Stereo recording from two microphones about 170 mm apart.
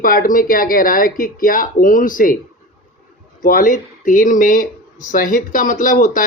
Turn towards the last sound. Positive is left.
turn(degrees=50)  # may be behind; listen again after turning